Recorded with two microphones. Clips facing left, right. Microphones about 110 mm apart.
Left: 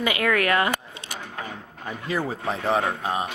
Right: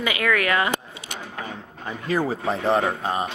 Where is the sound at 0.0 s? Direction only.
25° left (ahead or behind).